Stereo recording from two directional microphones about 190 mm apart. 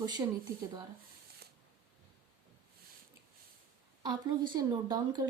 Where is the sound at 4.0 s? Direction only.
20° right (ahead or behind).